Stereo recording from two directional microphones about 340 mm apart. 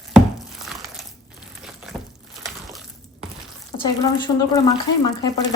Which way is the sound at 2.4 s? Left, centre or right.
Centre.